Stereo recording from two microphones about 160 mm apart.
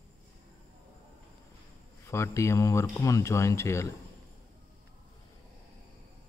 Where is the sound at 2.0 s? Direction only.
15° left (ahead or behind).